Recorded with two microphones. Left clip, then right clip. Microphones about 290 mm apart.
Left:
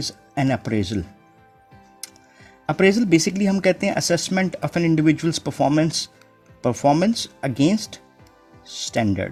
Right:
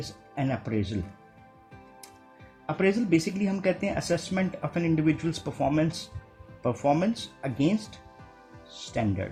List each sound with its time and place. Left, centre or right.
0.3 s speech: left
2.6 s speech: left